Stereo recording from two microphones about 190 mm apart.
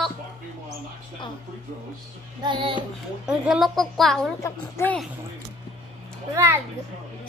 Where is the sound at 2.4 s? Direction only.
25° right (ahead or behind).